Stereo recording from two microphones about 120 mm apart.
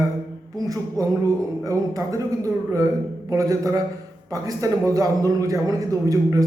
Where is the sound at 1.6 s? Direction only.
25° right (ahead or behind).